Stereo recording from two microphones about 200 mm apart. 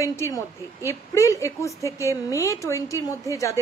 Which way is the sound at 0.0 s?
15° left (ahead or behind).